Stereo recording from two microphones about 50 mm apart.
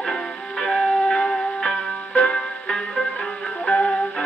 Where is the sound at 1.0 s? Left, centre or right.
Centre.